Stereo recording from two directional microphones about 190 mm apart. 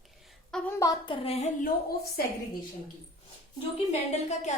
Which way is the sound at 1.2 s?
35° left (ahead or behind).